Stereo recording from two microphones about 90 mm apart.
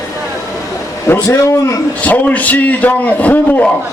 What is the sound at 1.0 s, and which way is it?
Speech, 30° left (ahead or behind).